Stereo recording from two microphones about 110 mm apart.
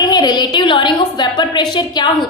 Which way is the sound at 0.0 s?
40° left (ahead or behind).